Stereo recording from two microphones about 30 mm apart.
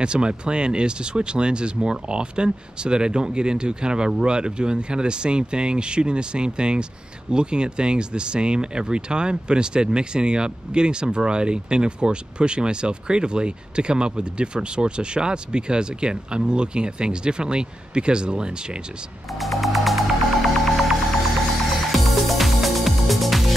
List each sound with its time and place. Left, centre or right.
0.0 s speech: right
19.3 s music: centre
21.9 s music: centre